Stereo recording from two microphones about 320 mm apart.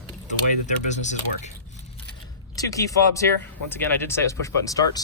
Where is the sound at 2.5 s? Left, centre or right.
Centre.